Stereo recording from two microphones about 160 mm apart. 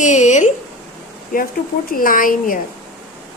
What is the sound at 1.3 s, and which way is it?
Speech, 60° left (ahead or behind).